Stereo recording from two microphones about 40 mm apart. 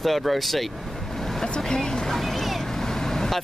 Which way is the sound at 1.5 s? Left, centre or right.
Centre.